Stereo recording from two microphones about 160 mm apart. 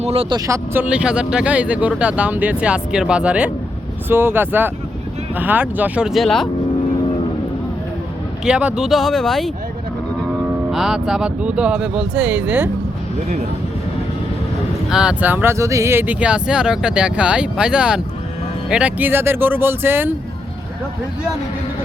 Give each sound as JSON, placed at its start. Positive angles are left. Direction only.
{"t": 0.0, "sound": "speech", "side_deg": -35}
{"t": 0.3, "sound": "speech", "side_deg": -20}
{"t": 8.4, "sound": "speech", "side_deg": -5}
{"t": 10.7, "sound": "speech", "side_deg": 0}
{"t": 14.8, "sound": "speech", "side_deg": -5}